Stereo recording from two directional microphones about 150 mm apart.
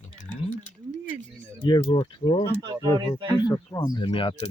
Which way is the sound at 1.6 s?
30° left (ahead or behind).